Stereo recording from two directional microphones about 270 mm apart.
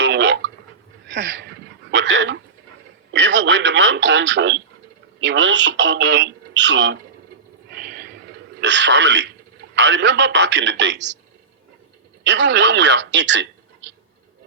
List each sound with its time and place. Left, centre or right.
0.0 s a sound: right
3.1 s radio: right
5.2 s speech: right
7.7 s a sound: right
8.6 s speech: right
12.2 s speech: right